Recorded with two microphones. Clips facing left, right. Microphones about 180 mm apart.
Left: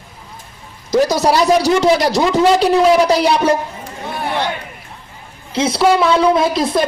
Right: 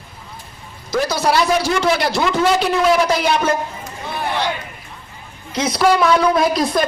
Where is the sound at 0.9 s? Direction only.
40° left (ahead or behind).